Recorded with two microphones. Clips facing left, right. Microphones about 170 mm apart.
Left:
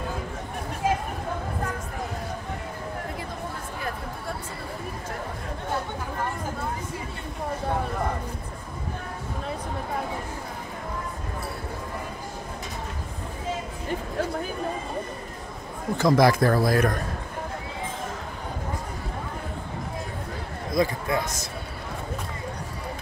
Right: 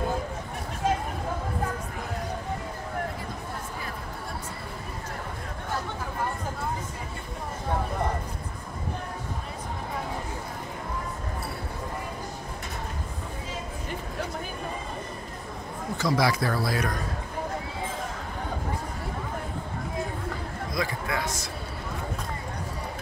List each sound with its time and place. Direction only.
16.0 s speech: 50° left (ahead or behind)
20.7 s a man's voice: 20° left (ahead or behind)